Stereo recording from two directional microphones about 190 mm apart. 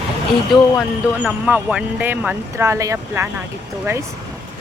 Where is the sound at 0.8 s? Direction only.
5° right (ahead or behind).